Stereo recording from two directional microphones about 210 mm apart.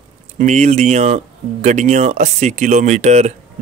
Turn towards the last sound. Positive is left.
turn(degrees=-30)  # may be behind; listen again after turning